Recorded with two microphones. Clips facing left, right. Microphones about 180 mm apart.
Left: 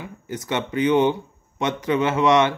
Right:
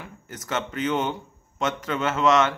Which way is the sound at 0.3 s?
15° left (ahead or behind).